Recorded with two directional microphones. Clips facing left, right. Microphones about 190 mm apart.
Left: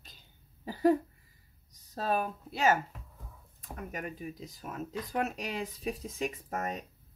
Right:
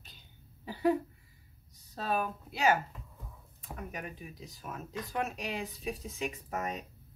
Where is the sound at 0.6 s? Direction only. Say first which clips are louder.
Left 3 dB; 40° left (ahead or behind).